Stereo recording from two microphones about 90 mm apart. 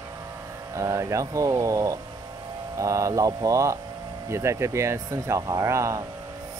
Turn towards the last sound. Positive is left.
turn(degrees=-35)  # may be behind; listen again after turning